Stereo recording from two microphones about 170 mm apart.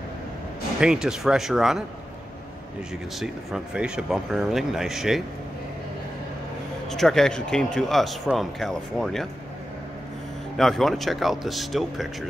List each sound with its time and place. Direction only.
0.7 s speech: 5° right (ahead or behind)
3.2 s speech: 5° right (ahead or behind)
6.9 s speech: centre (ahead or behind)
10.6 s speech: centre (ahead or behind)